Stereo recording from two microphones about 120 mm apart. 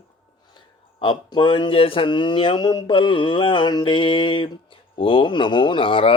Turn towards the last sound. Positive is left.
turn(degrees=45)  # may be behind; listen again after turning